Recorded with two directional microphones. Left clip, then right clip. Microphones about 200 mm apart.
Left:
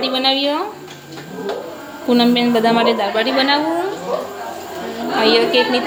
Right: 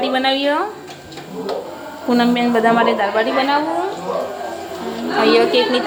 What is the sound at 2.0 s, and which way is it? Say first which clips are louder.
A woman's voice: left 1 dB; 15° left (ahead or behind).